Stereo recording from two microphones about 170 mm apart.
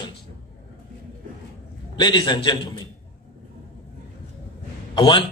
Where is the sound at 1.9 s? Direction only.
25° left (ahead or behind).